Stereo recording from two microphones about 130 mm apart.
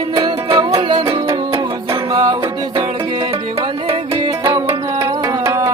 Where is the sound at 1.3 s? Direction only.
30° right (ahead or behind).